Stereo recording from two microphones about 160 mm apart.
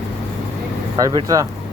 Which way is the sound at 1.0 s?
20° right (ahead or behind).